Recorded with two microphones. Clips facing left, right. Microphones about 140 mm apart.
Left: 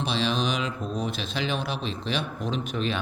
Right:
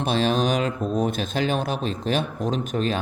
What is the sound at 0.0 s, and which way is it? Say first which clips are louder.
Speech: right 5 dB; 50° right (ahead or behind).